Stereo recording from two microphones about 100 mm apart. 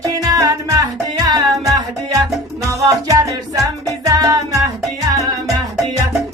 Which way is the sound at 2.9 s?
35° right (ahead or behind).